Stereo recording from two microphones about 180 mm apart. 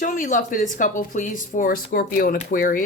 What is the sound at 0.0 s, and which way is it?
Speech, 45° left (ahead or behind).